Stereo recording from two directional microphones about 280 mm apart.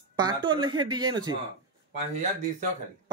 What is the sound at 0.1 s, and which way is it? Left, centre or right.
Speech, centre.